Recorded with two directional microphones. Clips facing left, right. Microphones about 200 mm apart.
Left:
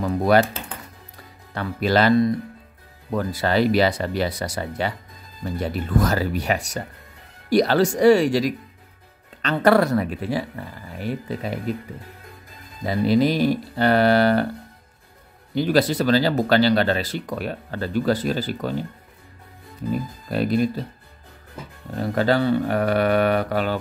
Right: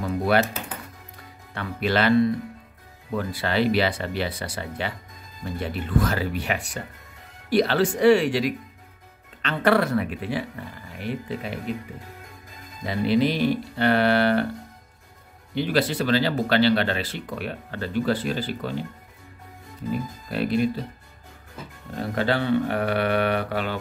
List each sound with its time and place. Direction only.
0.0 s speech: 40° left (ahead or behind)
1.5 s speech: 40° left (ahead or behind)
12.8 s speech: 40° left (ahead or behind)
15.5 s speech: 40° left (ahead or behind)
20.2 s speech: 40° left (ahead or behind)
22.0 s speech: 40° left (ahead or behind)